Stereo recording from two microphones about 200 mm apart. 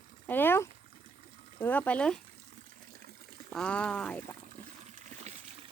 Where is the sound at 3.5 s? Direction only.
5° left (ahead or behind).